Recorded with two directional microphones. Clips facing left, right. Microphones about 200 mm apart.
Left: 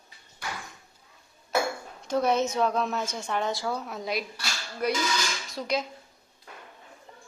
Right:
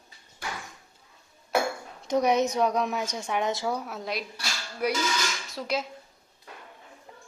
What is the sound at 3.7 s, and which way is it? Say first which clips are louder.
A woman's voice: left 1 dB; 5° right (ahead or behind).